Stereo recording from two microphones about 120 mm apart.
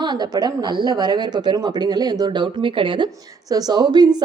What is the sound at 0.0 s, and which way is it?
A woman's voice, 35° right (ahead or behind).